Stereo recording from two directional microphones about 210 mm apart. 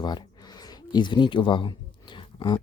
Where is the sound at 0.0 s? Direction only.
20° left (ahead or behind).